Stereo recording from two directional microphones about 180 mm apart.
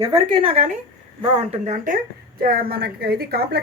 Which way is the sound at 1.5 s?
45° right (ahead or behind).